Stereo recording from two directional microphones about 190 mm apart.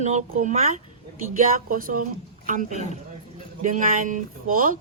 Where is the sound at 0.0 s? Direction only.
35° right (ahead or behind).